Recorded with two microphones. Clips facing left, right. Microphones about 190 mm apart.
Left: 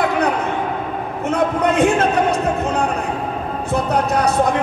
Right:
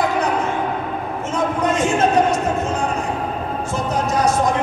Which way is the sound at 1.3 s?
60° left (ahead or behind).